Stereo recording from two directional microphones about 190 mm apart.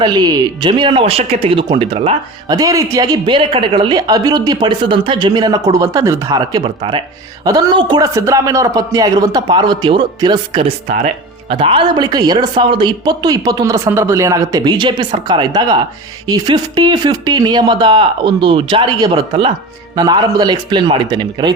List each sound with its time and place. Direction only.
0.0 s a man's voice: 20° right (ahead or behind)
2.5 s a man's voice: 20° right (ahead or behind)